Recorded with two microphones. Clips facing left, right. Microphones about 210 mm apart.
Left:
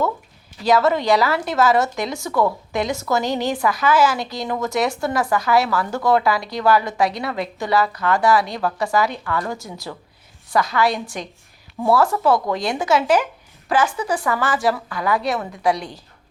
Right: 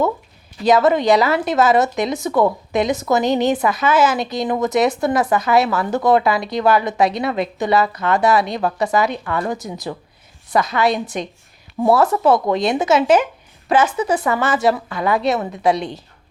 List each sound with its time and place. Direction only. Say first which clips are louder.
0.6 s a woman's voice: right 3 dB; 20° right (ahead or behind)